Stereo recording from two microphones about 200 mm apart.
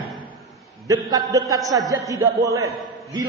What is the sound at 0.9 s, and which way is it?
A man's voice, 15° right (ahead or behind).